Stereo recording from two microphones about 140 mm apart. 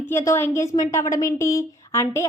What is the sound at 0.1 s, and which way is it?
A woman's voice, 15° left (ahead or behind).